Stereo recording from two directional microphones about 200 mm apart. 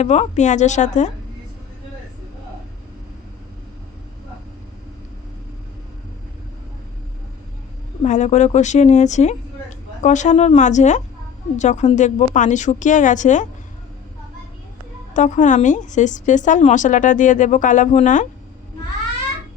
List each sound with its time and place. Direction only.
0.0 s a woman's voice: 35° left (ahead or behind)
8.0 s a woman's voice: 35° left (ahead or behind)
15.1 s a woman's voice: 40° left (ahead or behind)